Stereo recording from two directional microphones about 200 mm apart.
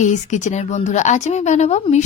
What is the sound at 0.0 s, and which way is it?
Speech, 35° left (ahead or behind).